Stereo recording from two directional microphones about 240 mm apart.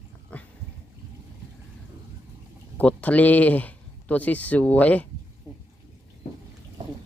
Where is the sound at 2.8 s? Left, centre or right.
Centre.